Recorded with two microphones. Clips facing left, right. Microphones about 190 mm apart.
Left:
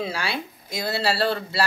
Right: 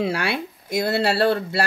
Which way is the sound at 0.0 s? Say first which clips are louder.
Right 5 dB; 60° right (ahead or behind).